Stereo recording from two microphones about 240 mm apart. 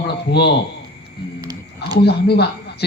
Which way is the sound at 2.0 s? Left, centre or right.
Left.